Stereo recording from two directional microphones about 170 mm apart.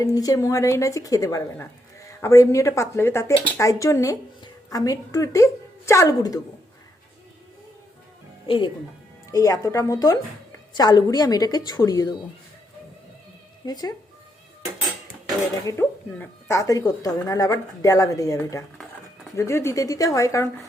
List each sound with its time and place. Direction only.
0.0 s a woman's voice: 20° left (ahead or behind)
8.4 s a woman's voice: 30° left (ahead or behind)
9.3 s a woman's voice: 20° left (ahead or behind)
13.7 s a woman's voice: 25° left (ahead or behind)
15.6 s a woman's voice: 10° left (ahead or behind)